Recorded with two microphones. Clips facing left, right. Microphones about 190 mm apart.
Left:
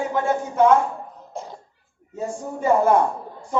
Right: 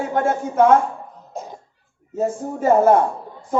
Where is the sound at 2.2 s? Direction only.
40° right (ahead or behind).